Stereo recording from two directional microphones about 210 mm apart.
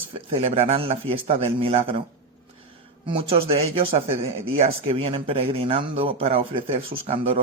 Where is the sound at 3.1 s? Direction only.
25° right (ahead or behind).